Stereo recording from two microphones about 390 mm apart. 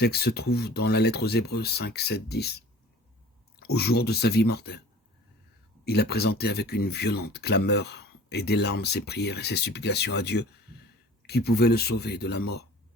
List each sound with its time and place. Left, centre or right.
0.0 s speech: left
5.8 s speech: left